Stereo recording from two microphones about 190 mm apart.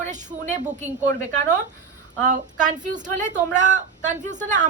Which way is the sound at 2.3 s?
40° right (ahead or behind).